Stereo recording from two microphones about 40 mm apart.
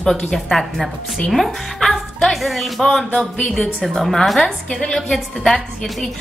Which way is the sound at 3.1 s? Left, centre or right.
Left.